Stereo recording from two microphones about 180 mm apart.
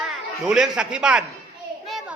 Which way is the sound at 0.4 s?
5° right (ahead or behind).